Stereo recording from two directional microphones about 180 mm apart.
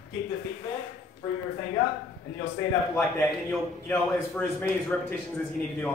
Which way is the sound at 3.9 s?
10° left (ahead or behind).